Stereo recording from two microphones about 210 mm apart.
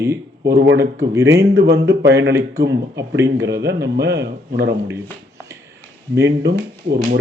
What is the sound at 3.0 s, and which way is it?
Speech, 15° right (ahead or behind).